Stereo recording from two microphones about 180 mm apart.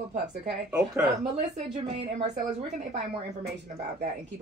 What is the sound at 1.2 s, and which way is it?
A woman's voice, 35° right (ahead or behind).